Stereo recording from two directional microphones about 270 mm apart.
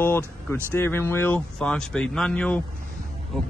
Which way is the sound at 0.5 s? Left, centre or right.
Centre.